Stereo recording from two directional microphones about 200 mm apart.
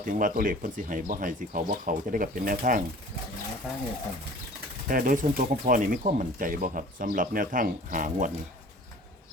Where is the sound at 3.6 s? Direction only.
5° right (ahead or behind).